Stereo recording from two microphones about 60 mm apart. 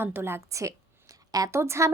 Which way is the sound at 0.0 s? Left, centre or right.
Right.